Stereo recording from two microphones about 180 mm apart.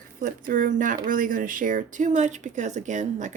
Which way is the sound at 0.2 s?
50° right (ahead or behind).